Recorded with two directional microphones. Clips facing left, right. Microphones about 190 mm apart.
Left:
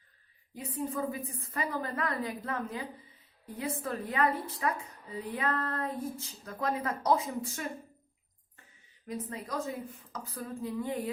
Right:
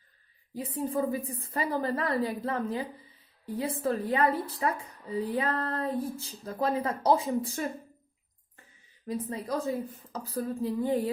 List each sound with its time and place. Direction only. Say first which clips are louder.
0.5 s speech: right 4 dB; 35° right (ahead or behind)
3.8 s a woman's voice: right 4 dB; 30° right (ahead or behind)
9.0 s speech: right 5 dB; 30° right (ahead or behind)